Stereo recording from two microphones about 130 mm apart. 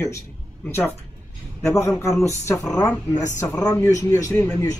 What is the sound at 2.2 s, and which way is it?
A man's voice, 20° left (ahead or behind).